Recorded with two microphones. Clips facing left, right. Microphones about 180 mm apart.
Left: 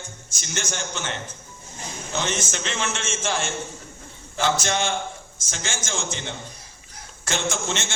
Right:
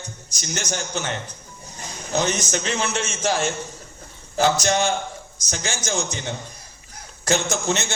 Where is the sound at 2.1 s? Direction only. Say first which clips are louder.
Right 5 dB; 40° right (ahead or behind).